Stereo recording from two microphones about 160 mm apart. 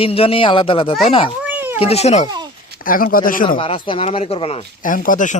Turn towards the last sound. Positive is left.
turn(degrees=55)  # may be behind; listen again after turning